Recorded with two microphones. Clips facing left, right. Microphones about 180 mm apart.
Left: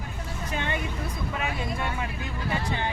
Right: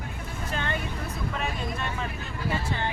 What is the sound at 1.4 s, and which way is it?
Speech, 10° left (ahead or behind).